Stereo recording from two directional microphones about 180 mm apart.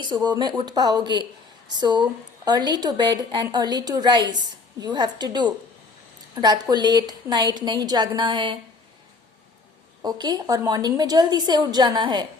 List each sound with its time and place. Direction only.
0.0 s a woman's voice: 25° right (ahead or behind)
10.0 s a woman's voice: 20° right (ahead or behind)